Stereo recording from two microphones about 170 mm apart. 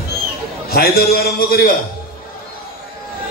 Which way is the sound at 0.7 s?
65° left (ahead or behind).